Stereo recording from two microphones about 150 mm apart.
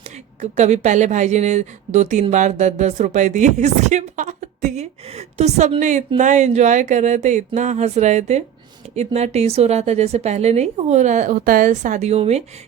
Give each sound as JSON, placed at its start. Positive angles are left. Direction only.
{"t": 0.5, "sound": "a woman's voice", "side_deg": -50}